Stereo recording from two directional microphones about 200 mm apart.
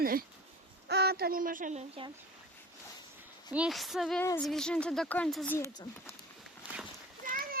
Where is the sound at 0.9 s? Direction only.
55° right (ahead or behind).